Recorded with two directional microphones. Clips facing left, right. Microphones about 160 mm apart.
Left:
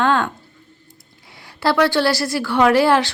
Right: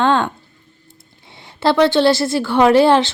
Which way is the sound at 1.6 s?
25° right (ahead or behind).